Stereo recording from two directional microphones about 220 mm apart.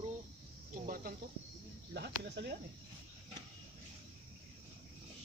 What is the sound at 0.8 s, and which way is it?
Speech, 40° right (ahead or behind).